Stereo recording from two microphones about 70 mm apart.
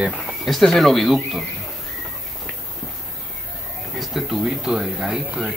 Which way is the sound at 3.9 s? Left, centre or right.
Centre.